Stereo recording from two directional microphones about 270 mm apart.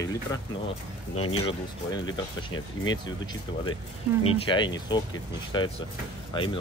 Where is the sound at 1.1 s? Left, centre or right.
Left.